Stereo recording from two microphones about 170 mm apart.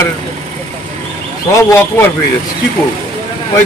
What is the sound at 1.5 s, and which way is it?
Speech, 20° left (ahead or behind).